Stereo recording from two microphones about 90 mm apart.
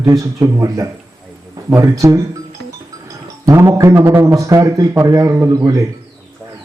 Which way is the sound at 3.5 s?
30° right (ahead or behind).